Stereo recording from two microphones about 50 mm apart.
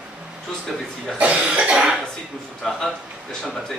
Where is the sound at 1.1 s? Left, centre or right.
Right.